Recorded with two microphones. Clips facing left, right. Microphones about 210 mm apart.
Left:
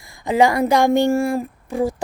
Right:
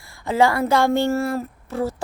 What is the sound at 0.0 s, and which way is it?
Speech, 15° left (ahead or behind).